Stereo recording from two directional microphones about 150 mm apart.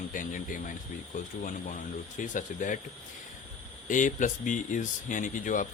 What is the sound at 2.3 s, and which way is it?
Speech, 60° left (ahead or behind).